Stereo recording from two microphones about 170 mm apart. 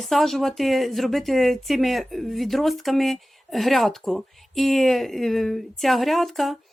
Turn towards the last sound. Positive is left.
turn(degrees=0)  # may be behind; listen again after turning